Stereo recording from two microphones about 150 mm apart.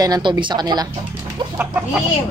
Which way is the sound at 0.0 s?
30° right (ahead or behind).